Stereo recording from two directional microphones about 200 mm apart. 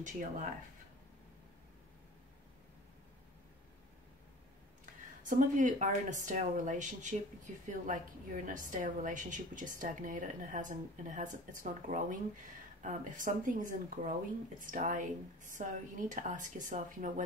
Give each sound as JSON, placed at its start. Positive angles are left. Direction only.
{"t": 0.0, "sound": "a woman's voice", "side_deg": -40}
{"t": 5.2, "sound": "a woman's voice", "side_deg": -40}